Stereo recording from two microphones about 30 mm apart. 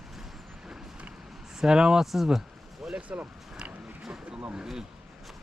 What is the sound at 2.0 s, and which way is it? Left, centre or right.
Speech, centre.